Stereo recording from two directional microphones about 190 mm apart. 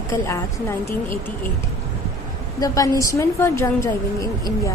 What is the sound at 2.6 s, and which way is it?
A woman's voice, 20° left (ahead or behind).